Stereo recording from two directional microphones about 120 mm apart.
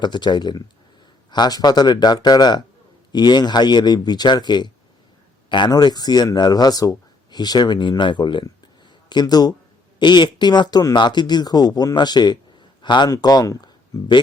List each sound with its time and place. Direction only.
0.0 s speech: 40° left (ahead or behind)